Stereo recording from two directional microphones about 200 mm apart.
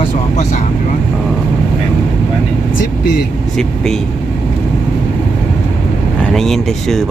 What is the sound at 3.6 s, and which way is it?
Speech, centre (ahead or behind).